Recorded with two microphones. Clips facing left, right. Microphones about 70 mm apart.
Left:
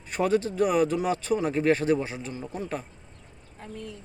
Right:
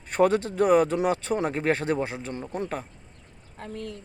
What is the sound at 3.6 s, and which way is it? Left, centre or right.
Speech, right.